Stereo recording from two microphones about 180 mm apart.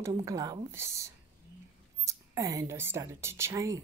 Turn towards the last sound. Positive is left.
turn(degrees=-15)  # may be behind; listen again after turning